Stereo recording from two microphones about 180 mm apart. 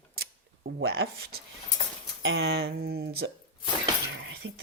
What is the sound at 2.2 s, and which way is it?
Speech, 80° right.